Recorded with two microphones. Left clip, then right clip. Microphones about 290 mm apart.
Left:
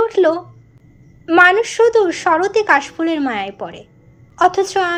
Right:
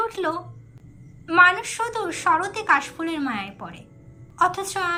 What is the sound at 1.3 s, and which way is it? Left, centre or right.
Speech, centre.